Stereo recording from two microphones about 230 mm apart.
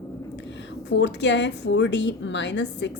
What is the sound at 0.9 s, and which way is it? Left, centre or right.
A woman's voice, left.